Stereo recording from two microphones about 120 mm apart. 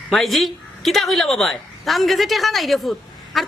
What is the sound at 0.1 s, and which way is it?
A woman's voice, centre (ahead or behind).